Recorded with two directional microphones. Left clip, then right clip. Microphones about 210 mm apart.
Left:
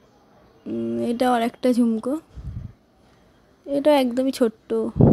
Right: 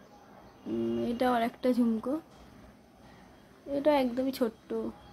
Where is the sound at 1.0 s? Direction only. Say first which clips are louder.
Left 9 dB; 35° left (ahead or behind).